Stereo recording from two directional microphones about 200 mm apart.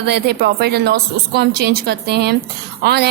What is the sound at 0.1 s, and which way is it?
A woman's voice, 55° right (ahead or behind).